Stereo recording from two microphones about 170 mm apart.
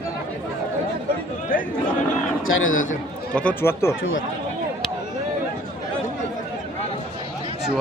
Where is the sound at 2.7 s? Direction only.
50° left (ahead or behind).